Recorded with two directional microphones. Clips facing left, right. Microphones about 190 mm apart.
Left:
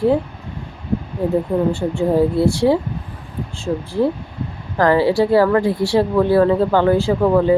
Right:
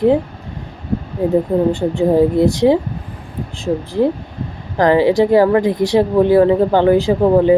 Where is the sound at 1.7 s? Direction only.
15° right (ahead or behind).